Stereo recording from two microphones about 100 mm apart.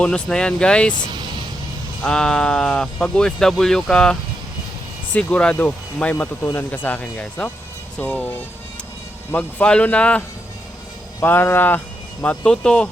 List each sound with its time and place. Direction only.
0.0 s speech: 5° left (ahead or behind)
2.0 s speech: 5° left (ahead or behind)